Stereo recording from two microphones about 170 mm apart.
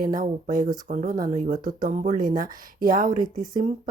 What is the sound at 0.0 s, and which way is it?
Speech, 50° right (ahead or behind).